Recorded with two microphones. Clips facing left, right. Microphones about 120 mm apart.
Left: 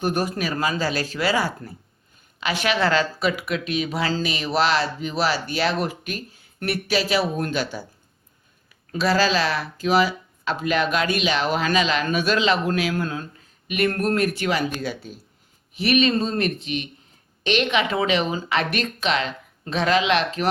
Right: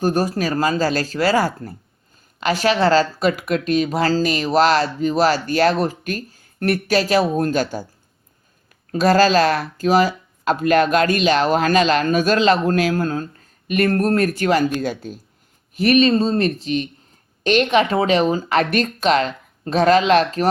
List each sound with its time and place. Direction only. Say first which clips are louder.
0.0 s speech: right 5 dB; 40° right (ahead or behind)
8.9 s speech: right 6 dB; 45° right (ahead or behind)